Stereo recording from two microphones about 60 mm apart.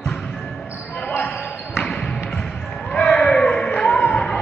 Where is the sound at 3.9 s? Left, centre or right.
Left.